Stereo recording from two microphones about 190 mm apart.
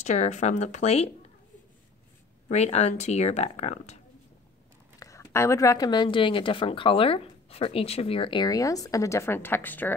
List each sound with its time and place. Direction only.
0.0 s speech: 35° left (ahead or behind)
2.4 s speech: 35° left (ahead or behind)
4.9 s speech: 15° left (ahead or behind)